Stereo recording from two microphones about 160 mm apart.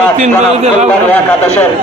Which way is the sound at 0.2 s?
45° right (ahead or behind).